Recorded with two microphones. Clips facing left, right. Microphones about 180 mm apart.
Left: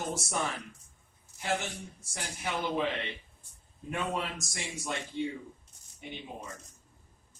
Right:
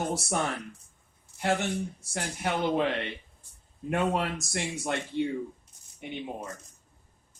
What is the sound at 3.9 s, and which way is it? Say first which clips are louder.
Speech: right 6 dB; 60° right (ahead or behind).